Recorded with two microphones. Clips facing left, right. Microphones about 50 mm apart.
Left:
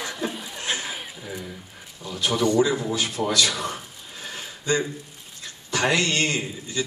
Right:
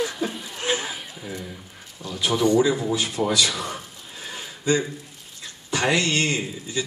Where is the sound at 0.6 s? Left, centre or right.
Right.